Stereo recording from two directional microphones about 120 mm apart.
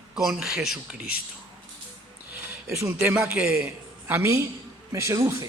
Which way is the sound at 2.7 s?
25° right (ahead or behind).